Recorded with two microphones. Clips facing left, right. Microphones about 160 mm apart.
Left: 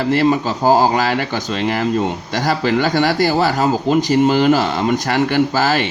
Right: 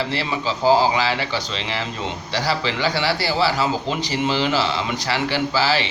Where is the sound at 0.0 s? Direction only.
50° left (ahead or behind).